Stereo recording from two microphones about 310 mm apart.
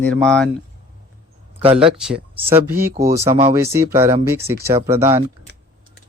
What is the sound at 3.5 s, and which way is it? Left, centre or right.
Speech, centre.